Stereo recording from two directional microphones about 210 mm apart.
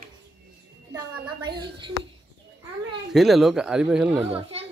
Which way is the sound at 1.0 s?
20° right (ahead or behind).